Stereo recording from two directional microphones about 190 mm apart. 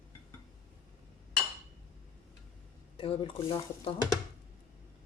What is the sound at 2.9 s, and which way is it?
Speech, 30° left (ahead or behind).